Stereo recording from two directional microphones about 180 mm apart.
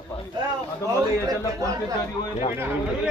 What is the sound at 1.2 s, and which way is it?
Speech, 20° right (ahead or behind).